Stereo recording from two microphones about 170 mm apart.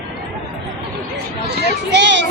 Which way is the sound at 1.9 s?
90° right.